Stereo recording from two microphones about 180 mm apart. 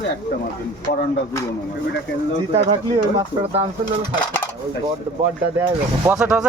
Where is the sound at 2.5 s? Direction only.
30° right (ahead or behind).